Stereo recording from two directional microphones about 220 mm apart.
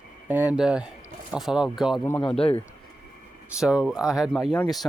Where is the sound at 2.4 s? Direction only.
25° left (ahead or behind).